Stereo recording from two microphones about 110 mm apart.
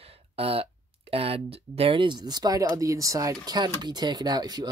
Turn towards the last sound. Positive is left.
turn(degrees=-35)  # may be behind; listen again after turning